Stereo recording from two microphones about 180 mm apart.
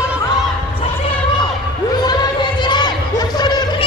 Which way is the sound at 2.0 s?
25° left (ahead or behind).